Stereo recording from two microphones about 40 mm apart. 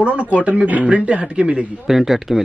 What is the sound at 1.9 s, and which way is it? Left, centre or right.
Speech, centre.